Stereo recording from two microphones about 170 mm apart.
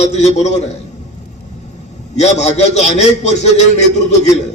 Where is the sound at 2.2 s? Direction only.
40° left (ahead or behind).